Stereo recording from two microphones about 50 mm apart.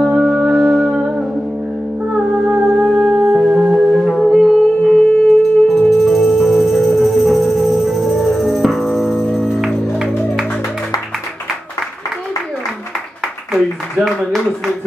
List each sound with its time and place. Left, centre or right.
0.0 s music: centre
0.9 s music: right
3.4 s music: centre
9.6 s music: centre
13.5 s a sound: centre